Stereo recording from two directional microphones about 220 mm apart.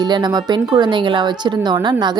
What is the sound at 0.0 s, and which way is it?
Speech, 20° right (ahead or behind).